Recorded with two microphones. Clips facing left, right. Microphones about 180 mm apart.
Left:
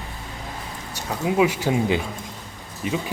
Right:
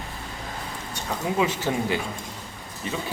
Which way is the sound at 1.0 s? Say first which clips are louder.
Left 4 dB; 10° left (ahead or behind).